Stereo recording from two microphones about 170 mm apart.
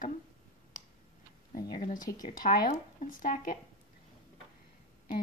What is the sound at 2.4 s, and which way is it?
Speech, 55° left (ahead or behind).